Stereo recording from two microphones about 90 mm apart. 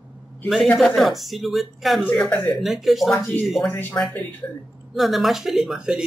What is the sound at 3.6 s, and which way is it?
Speech, 20° left (ahead or behind).